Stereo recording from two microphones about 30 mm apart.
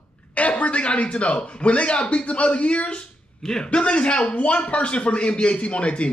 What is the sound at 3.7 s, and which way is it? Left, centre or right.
A man's voice, left.